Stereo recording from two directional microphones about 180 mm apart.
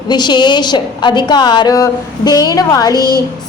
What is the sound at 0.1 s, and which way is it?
A woman's voice, 25° left (ahead or behind).